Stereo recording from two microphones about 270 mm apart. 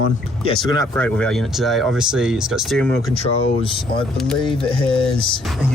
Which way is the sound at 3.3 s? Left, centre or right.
Centre.